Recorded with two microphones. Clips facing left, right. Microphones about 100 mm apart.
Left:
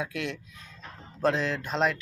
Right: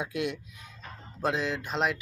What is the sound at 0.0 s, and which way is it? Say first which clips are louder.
Speech: right 1 dB; 20° right (ahead or behind).